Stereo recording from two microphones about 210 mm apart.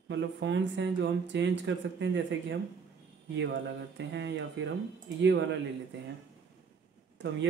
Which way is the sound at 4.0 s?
55° right (ahead or behind).